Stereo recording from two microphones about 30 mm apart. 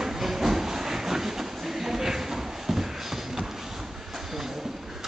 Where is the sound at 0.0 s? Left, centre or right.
Centre.